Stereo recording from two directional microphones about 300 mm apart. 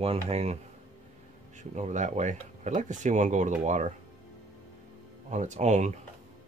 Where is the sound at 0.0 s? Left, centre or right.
Centre.